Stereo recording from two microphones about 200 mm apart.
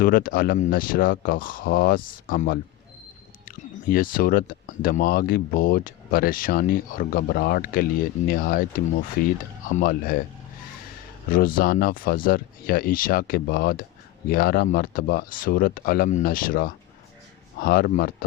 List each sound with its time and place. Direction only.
0.0 s speech: 45° left (ahead or behind)
11.3 s speech: 45° left (ahead or behind)